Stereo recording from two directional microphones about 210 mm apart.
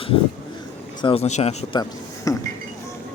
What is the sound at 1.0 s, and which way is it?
Speech, 30° left (ahead or behind).